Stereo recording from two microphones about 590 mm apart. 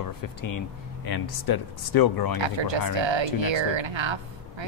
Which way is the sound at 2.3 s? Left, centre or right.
Right.